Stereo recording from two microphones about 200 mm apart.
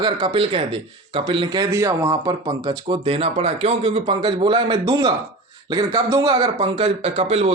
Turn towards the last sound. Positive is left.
turn(degrees=-30)  # may be behind; listen again after turning